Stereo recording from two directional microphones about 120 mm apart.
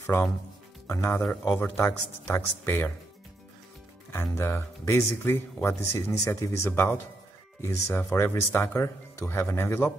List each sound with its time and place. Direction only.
0.0 s speech: 15° left (ahead or behind)
4.4 s speech: 20° left (ahead or behind)